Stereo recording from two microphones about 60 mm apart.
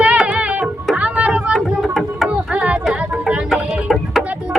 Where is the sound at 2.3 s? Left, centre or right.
Centre.